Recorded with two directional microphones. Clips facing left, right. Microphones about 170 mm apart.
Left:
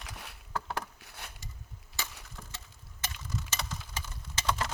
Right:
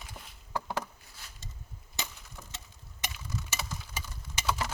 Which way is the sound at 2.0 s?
20° right (ahead or behind).